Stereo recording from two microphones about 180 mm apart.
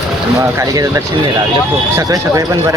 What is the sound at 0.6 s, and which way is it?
Speech, 15° right (ahead or behind).